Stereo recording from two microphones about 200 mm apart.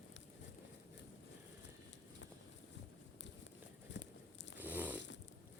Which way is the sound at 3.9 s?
65° left (ahead or behind).